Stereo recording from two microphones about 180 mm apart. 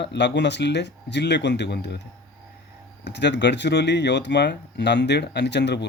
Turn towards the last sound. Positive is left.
turn(degrees=70)  # may be behind; listen again after turning